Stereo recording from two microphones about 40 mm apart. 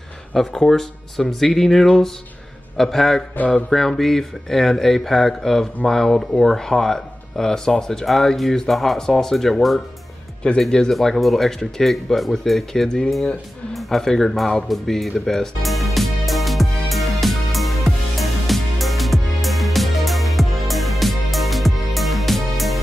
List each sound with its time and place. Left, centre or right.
0.3 s speech: centre
8.9 s speech: centre
10.4 s speech: left
10.9 s speech: centre
15.6 s music: centre